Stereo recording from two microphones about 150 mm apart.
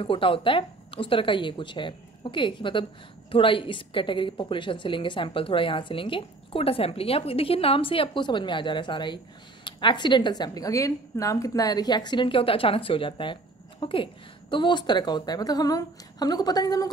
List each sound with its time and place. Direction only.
0.0 s a woman's voice: 35° left (ahead or behind)